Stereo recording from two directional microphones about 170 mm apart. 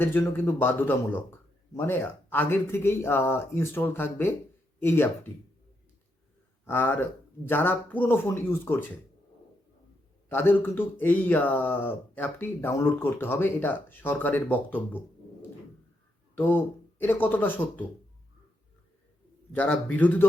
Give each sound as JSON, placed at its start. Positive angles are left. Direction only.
{"t": 0.0, "sound": "speech", "side_deg": 10}
{"t": 6.7, "sound": "speech", "side_deg": 10}
{"t": 10.2, "sound": "speech", "side_deg": 10}
{"t": 19.5, "sound": "speech", "side_deg": 10}